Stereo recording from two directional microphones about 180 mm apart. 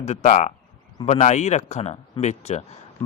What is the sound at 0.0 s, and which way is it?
Speech, 40° left (ahead or behind).